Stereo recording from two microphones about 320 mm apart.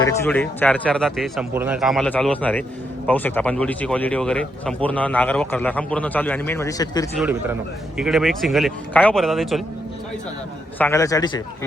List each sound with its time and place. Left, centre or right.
0.0 s speech: centre
7.2 s speech: centre
10.8 s a man's voice: centre